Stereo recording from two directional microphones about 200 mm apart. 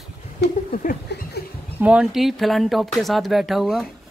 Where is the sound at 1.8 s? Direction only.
5° right (ahead or behind).